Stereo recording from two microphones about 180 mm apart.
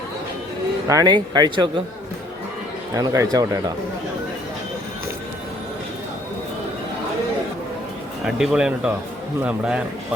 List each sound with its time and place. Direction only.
0.9 s speech: 20° right (ahead or behind)
2.9 s speech: 20° right (ahead or behind)
8.2 s a man's voice: 5° right (ahead or behind)